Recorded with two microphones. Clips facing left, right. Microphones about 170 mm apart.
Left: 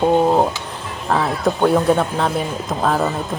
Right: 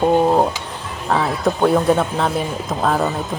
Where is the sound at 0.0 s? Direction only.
Centre (ahead or behind).